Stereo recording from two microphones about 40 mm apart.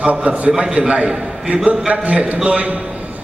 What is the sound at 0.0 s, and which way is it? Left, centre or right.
A man's voice, right.